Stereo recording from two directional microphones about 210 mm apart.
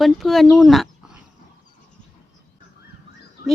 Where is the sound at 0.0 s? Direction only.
Centre (ahead or behind).